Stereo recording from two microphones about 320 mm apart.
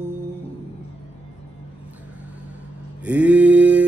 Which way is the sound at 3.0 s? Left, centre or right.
Centre.